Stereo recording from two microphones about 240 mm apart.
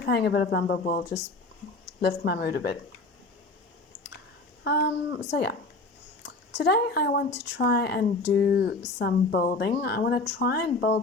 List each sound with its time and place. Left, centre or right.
0.0 s speech: left
4.6 s a sound: left
5.3 s speech: left